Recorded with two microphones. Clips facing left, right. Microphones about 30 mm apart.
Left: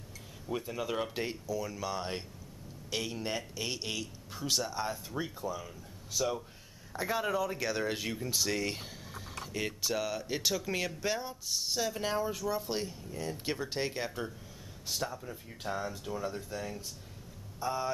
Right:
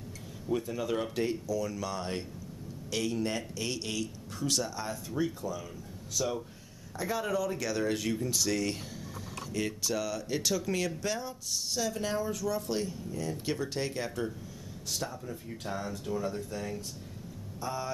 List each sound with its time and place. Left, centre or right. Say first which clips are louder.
0.5 s speech: right 4 dB; centre
7.0 s speech: even; centre
17.6 s speech: left 2 dB; centre